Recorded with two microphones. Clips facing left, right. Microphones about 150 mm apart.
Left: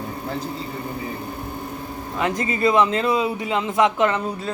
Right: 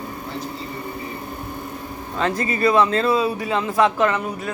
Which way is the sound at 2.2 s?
20° left (ahead or behind).